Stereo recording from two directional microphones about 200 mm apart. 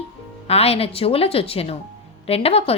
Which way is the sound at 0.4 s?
30° left (ahead or behind).